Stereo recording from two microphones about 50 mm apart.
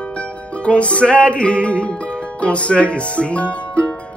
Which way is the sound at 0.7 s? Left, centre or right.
Left.